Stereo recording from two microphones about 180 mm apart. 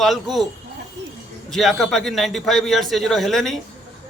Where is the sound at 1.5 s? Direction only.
Centre (ahead or behind).